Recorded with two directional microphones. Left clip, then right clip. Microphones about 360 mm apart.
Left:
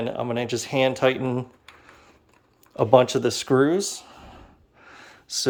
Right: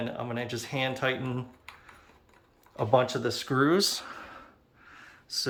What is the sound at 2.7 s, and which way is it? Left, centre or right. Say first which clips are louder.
Speech: left 8 dB; left.